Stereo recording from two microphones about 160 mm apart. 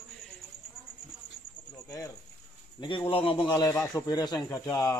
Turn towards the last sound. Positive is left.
turn(degrees=20)  # may be behind; listen again after turning